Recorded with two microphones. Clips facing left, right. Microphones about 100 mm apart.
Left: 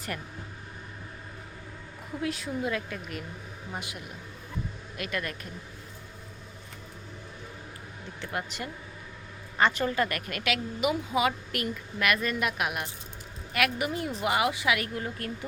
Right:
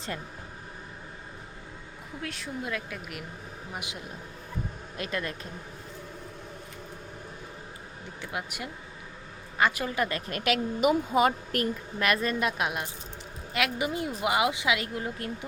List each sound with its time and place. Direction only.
2.2 s speech: centre (ahead or behind)
3.8 s speech: 20° right (ahead or behind)
8.2 s a woman's voice: 10° right (ahead or behind)
10.3 s a woman's voice: 40° right (ahead or behind); by 15.4 s 20° right (ahead or behind)